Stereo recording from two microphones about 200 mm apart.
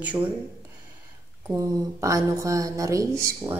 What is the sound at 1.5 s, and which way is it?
Speech, 15° right (ahead or behind).